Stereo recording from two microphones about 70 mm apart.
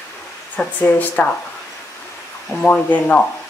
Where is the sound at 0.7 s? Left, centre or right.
Left.